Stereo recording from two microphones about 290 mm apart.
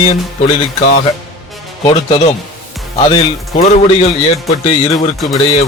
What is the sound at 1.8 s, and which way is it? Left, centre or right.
A man's voice, centre.